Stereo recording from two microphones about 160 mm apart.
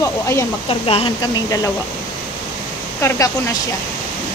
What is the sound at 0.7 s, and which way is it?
Speech, 35° left (ahead or behind).